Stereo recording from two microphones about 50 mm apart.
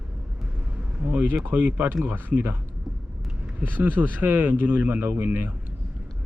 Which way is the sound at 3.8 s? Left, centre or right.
Right.